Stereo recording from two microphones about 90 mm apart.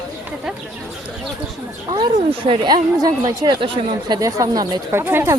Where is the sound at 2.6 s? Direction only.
50° right (ahead or behind).